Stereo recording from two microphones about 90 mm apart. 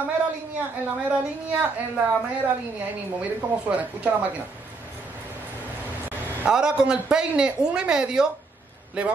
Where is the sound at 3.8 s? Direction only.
15° right (ahead or behind).